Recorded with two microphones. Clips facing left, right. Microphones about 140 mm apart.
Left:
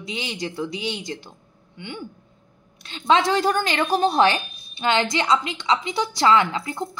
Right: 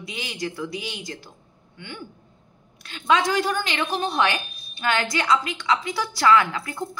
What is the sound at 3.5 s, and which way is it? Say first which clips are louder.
Speech: left 4 dB; 45° left (ahead or behind).